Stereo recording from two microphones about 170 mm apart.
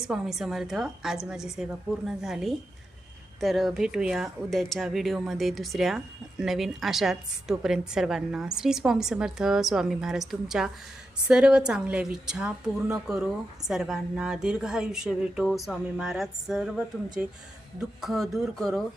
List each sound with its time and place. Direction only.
0.1 s a woman's voice: centre (ahead or behind)